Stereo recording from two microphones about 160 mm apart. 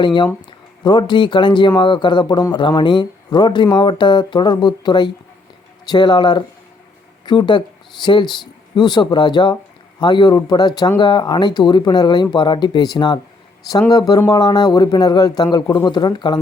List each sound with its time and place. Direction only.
0.0 s speech: 30° left (ahead or behind)